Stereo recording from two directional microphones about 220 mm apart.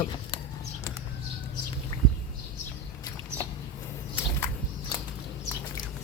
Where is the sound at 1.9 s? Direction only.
15° left (ahead or behind).